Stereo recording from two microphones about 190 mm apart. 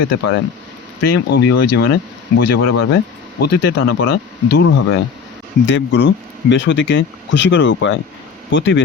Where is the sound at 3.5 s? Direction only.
55° left (ahead or behind).